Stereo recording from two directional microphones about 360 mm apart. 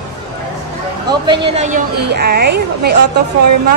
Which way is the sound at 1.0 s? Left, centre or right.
Centre.